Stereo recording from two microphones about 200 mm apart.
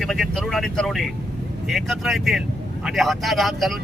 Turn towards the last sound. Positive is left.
turn(degrees=0)  # may be behind; listen again after turning